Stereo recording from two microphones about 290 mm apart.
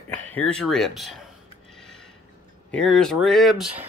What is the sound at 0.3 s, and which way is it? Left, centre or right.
Speech, centre.